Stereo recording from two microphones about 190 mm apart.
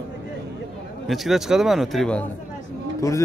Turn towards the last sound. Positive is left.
turn(degrees=15)  # may be behind; listen again after turning